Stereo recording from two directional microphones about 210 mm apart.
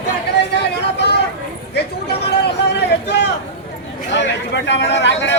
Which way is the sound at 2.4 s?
55° left (ahead or behind).